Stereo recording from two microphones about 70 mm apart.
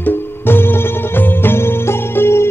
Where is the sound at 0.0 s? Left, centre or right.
Left.